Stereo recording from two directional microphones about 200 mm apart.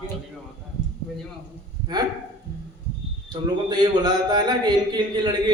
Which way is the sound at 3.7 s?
20° right (ahead or behind).